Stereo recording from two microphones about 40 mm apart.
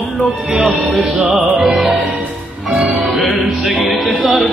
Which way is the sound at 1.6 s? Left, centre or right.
Centre.